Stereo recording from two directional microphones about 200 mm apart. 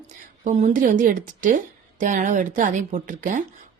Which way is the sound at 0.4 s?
40° right (ahead or behind).